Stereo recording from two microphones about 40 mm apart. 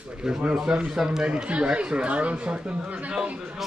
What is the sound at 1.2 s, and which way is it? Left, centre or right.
A man's voice, right.